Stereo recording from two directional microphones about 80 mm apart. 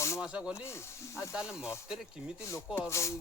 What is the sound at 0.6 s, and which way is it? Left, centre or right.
Speech, left.